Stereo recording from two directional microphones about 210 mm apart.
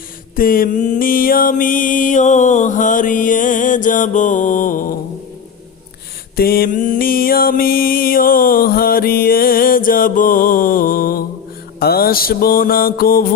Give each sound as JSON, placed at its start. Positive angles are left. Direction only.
{"t": 0.3, "sound": "mantra", "side_deg": 45}
{"t": 6.3, "sound": "mantra", "side_deg": 45}